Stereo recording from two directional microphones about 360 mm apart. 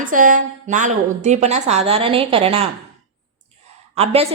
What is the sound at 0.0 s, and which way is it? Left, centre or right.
A woman's voice, right.